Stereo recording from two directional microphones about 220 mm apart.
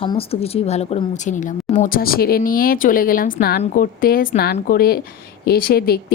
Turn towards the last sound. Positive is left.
turn(degrees=45)  # may be behind; listen again after turning